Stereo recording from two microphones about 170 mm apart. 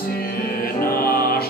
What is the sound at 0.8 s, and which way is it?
Music, 60° left (ahead or behind).